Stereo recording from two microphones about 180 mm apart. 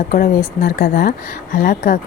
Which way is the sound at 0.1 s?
55° left (ahead or behind).